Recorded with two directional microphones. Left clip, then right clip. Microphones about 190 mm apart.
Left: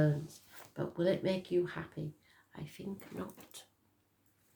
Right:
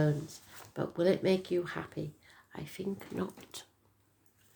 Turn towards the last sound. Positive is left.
turn(degrees=-45)  # may be behind; listen again after turning